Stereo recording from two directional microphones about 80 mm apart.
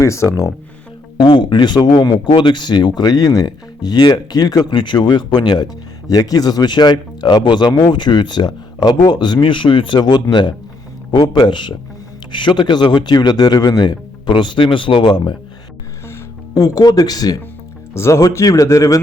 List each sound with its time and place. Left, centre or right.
0.0 s speech: left
1.2 s speech: left
6.1 s speech: left
12.3 s speech: left
15.0 s speech: left
16.6 s speech: left
17.9 s speech: left